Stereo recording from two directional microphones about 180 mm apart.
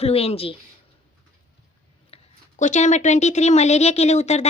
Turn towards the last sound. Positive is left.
turn(degrees=40)  # may be behind; listen again after turning